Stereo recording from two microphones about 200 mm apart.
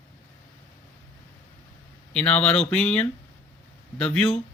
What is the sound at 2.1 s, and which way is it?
Speech, 5° left (ahead or behind).